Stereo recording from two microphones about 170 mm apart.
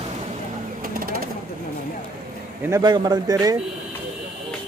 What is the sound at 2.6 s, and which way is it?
Speech, 20° right (ahead or behind).